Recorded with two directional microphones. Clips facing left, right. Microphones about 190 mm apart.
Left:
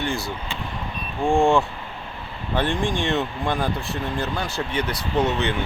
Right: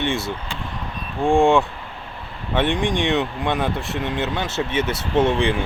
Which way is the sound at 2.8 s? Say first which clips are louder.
Right 3 dB; 20° right (ahead or behind).